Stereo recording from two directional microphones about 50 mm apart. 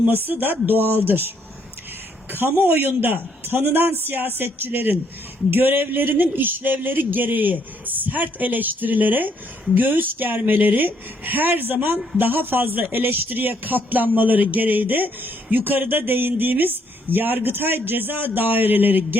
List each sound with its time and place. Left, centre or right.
0.3 s speech: right
2.4 s speech: right